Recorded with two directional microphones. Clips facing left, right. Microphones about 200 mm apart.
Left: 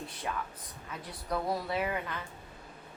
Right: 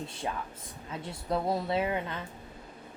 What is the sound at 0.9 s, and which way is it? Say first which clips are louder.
Speech: right 4 dB; 25° right (ahead or behind).